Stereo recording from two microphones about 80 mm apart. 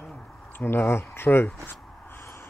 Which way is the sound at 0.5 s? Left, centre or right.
Left.